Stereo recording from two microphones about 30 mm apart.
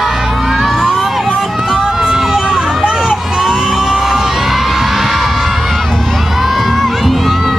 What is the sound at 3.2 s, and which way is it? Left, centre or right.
Crowd, centre.